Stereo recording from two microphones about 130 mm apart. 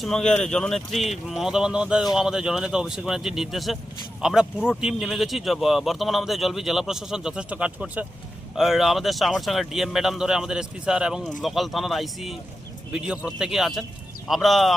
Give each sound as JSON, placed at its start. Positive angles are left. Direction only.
{"t": 0.0, "sound": "speech", "side_deg": 5}